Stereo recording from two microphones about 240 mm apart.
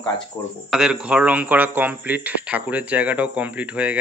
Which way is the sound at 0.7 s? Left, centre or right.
Centre.